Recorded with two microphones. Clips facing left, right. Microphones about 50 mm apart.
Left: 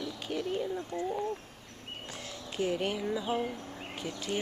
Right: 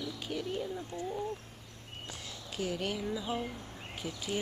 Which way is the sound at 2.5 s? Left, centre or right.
Centre.